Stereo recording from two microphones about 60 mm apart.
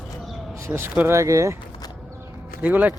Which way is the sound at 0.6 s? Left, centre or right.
Right.